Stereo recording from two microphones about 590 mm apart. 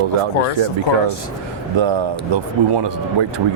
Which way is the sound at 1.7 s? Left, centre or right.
Right.